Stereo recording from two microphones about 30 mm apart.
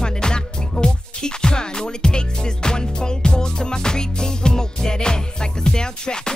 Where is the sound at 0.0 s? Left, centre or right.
Left.